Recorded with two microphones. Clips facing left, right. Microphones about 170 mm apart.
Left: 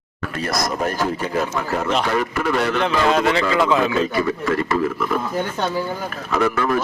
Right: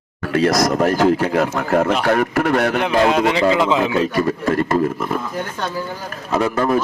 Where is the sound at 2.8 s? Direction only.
15° right (ahead or behind).